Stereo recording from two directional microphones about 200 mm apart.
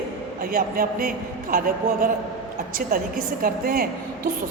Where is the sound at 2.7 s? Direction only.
45° right (ahead or behind).